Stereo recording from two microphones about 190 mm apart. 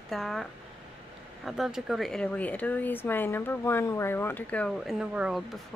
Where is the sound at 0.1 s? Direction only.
Centre (ahead or behind).